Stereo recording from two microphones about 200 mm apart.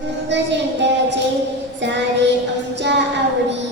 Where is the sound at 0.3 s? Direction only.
60° right (ahead or behind).